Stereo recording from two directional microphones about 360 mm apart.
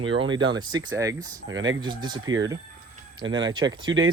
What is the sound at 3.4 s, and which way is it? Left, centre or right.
Speech, centre.